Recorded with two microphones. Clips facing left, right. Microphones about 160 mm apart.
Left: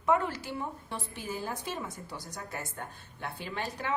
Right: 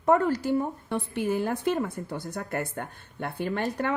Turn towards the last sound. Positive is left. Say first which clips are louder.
# right 8 dB
turn(degrees=-50)  # may be behind; listen again after turning